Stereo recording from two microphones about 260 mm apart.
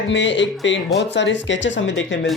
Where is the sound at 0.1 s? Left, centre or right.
Left.